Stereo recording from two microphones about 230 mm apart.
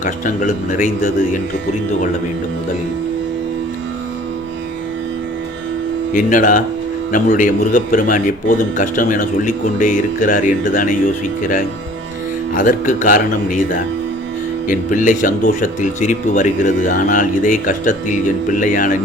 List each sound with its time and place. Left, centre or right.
0.0 s speech: left
6.1 s speech: left
12.5 s speech: left